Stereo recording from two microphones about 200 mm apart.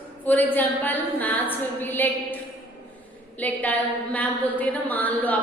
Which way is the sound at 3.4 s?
5° left (ahead or behind).